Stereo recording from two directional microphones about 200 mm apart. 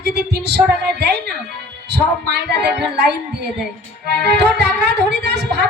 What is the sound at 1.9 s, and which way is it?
A woman's voice, 55° right (ahead or behind).